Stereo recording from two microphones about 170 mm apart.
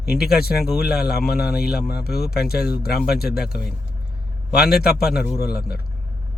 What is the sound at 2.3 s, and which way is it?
Speech, 65° left (ahead or behind).